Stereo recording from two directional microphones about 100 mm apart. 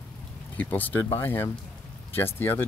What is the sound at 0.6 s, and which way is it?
Speech, 15° left (ahead or behind).